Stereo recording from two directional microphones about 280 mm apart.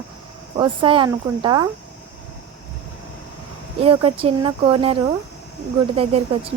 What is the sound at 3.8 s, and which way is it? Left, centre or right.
A woman's voice, centre.